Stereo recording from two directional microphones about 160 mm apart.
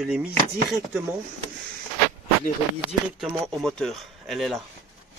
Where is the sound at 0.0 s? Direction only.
5° right (ahead or behind).